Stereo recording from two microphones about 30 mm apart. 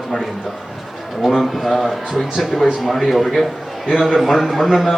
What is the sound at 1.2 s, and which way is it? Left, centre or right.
Speech, centre.